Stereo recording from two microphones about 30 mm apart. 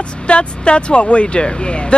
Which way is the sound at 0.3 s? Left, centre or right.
Left.